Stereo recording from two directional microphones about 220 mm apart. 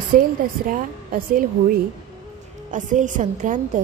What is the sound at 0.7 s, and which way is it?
A woman's voice, 40° right (ahead or behind).